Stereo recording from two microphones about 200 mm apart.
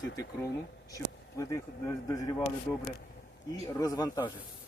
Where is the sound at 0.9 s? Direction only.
15° left (ahead or behind).